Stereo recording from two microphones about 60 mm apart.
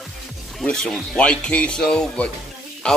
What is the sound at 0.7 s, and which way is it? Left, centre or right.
Speech, centre.